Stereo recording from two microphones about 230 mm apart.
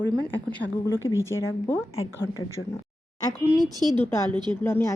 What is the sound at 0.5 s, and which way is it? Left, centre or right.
A woman's voice, centre.